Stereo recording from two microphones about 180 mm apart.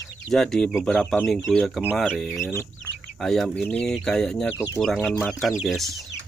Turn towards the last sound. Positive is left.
turn(degrees=0)  # may be behind; listen again after turning